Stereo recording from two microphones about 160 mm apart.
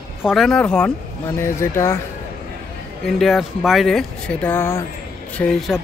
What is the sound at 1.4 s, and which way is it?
Speech, 15° left (ahead or behind).